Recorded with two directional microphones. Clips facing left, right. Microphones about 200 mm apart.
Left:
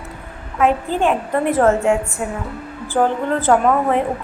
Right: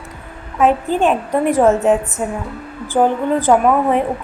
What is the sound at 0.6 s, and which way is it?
A woman's voice, 15° right (ahead or behind).